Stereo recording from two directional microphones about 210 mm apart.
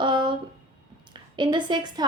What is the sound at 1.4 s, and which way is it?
Speech, 20° right (ahead or behind).